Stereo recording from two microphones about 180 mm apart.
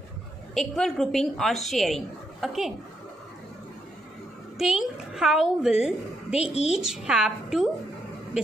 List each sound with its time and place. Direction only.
0.6 s a woman's voice: centre (ahead or behind)
4.6 s a woman's voice: centre (ahead or behind)